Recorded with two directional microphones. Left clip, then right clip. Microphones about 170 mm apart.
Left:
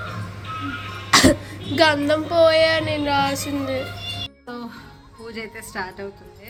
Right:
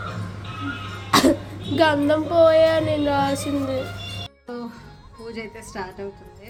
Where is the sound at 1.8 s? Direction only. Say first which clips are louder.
Left 1 dB; 15° right (ahead or behind).